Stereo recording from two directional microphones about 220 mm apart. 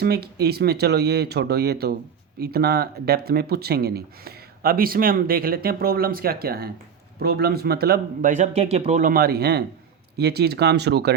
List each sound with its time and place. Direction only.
0.0 s speech: 45° right (ahead or behind)